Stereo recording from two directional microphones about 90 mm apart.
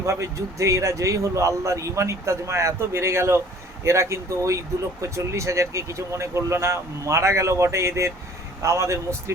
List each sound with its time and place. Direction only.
0.0 s speech: 35° right (ahead or behind)